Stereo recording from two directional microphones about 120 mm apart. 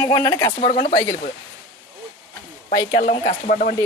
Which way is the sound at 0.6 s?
55° left (ahead or behind).